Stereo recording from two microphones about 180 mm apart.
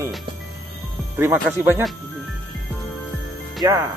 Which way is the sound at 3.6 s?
15° right (ahead or behind).